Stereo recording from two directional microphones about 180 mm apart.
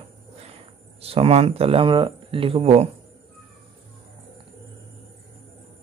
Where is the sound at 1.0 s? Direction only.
35° right (ahead or behind).